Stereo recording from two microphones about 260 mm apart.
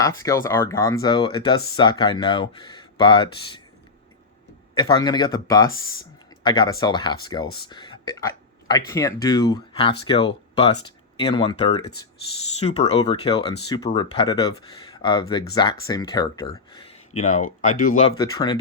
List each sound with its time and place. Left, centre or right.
0.0 s speech: centre
5.0 s speech: centre
7.7 s a sound: centre
8.9 s speech: centre
17.2 s speech: left
18.2 s speech: centre